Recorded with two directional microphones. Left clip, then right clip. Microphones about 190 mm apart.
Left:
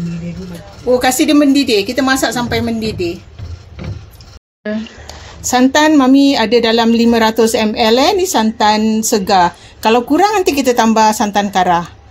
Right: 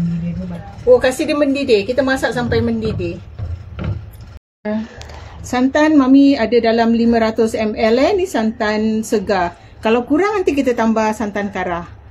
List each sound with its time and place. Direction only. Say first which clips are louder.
1.0 s a woman's voice: left 4 dB; 45° left (ahead or behind)
5.4 s a woman's voice: left 4 dB; 35° left (ahead or behind)